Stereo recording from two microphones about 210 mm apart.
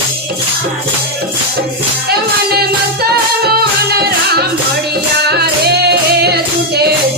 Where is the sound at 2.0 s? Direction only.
50° right (ahead or behind).